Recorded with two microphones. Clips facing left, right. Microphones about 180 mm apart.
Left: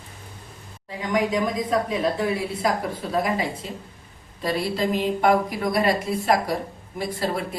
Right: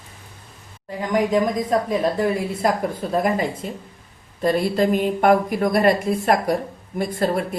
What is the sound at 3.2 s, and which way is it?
A woman's voice, 50° right (ahead or behind).